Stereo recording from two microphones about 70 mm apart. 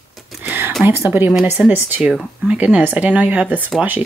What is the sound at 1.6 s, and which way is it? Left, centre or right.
Speech, centre.